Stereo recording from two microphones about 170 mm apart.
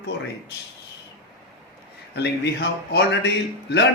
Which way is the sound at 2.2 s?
85° left.